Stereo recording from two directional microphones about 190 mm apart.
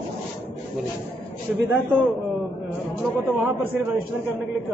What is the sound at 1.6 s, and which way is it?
Speech, 10° right (ahead or behind).